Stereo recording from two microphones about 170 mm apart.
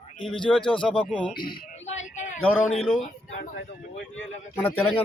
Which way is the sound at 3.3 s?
65° left (ahead or behind).